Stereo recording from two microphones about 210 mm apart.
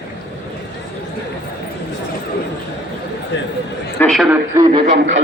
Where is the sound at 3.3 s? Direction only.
60° left (ahead or behind).